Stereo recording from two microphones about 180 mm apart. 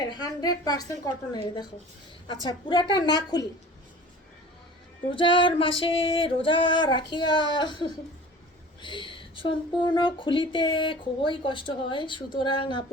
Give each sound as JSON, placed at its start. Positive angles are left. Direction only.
{"t": 0.1, "sound": "speech", "side_deg": 20}
{"t": 5.1, "sound": "speech", "side_deg": 25}